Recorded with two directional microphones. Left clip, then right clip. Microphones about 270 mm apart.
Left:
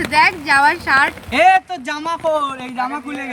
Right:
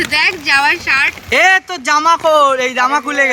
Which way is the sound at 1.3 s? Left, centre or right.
Centre.